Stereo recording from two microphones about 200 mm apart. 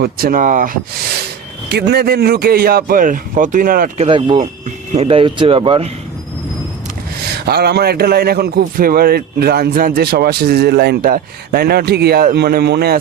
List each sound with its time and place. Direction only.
0.0 s a man's voice: 45° right (ahead or behind)
1.7 s a man's voice: 50° right (ahead or behind)
3.9 s speech: 25° right (ahead or behind)
7.3 s a man's voice: 55° right (ahead or behind)